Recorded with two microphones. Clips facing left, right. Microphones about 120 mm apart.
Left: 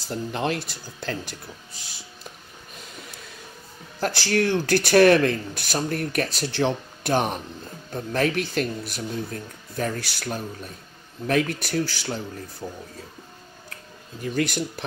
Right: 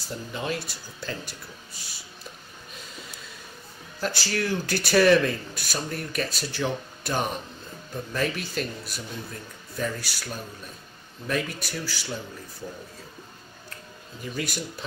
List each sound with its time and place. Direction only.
0.1 s speech: 65° left (ahead or behind)
4.0 s speech: 60° left (ahead or behind)
14.2 s speech: 60° left (ahead or behind)